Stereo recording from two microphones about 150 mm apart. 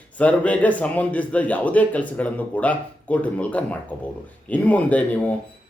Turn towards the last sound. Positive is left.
turn(degrees=10)  # may be behind; listen again after turning